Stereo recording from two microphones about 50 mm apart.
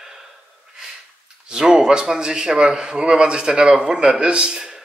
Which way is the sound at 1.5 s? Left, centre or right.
Centre.